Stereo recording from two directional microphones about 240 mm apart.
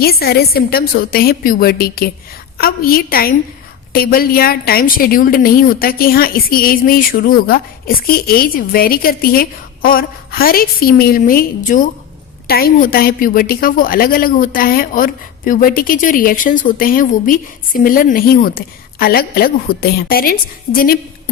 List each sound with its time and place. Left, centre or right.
0.0 s a woman's voice: left